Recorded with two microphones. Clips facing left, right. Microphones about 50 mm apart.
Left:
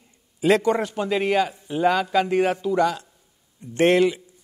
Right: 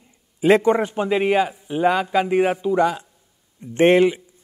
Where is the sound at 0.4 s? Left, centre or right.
Right.